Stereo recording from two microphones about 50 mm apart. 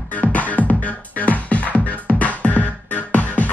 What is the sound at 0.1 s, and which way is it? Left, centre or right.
Music, left.